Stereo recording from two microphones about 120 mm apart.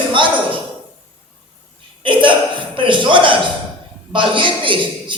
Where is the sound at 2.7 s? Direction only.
45° right (ahead or behind).